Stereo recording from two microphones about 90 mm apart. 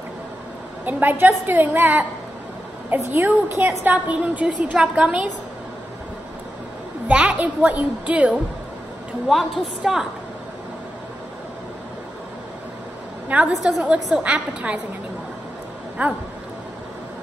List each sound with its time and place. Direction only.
0.8 s a woman's voice: 20° right (ahead or behind)
7.1 s a woman's voice: 15° right (ahead or behind)
9.3 s a woman's voice: centre (ahead or behind)
13.6 s a woman's voice: 10° right (ahead or behind)
16.0 s a woman's voice: 20° right (ahead or behind)